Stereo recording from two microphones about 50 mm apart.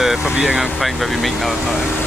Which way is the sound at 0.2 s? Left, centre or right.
Centre.